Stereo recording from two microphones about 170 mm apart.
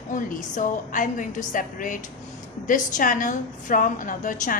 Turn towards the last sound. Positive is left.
turn(degrees=50)  # may be behind; listen again after turning